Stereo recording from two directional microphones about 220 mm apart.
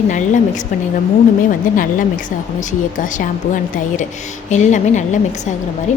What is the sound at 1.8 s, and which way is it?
Speech, 35° left (ahead or behind).